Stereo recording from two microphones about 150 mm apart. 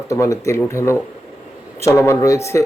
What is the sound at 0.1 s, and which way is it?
Speech, 20° left (ahead or behind).